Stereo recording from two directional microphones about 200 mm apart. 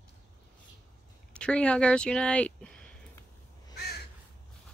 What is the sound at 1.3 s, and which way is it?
Speech, 5° left (ahead or behind).